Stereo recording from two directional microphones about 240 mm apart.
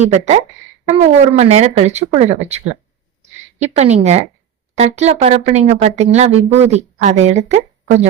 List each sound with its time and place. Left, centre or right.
0.1 s speech: right
3.6 s speech: right